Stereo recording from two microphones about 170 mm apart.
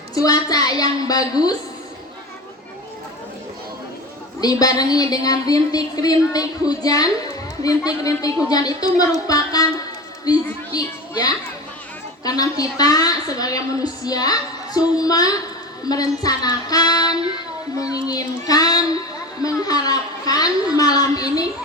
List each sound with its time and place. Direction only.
0.1 s speech: 20° left (ahead or behind)
4.4 s speech: 20° left (ahead or behind)
9.2 s music: 20° left (ahead or behind)
10.2 s a woman's voice: 20° left (ahead or behind)